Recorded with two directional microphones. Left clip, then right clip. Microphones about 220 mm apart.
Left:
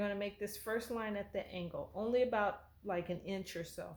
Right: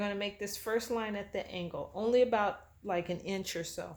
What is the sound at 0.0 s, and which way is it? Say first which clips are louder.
Speech: right 3 dB; 30° right (ahead or behind).